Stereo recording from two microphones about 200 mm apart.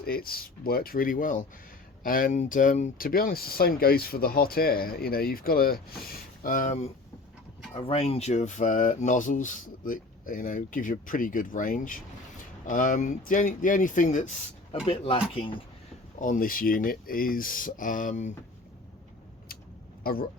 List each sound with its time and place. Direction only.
0.0 s speech: 50° left (ahead or behind); by 15.6 s 25° left (ahead or behind)
16.1 s speech: 40° left (ahead or behind)